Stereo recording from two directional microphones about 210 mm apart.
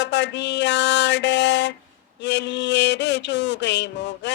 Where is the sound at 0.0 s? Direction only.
55° left (ahead or behind).